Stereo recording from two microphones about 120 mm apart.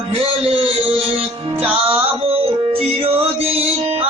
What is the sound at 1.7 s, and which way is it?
Music, 55° right (ahead or behind).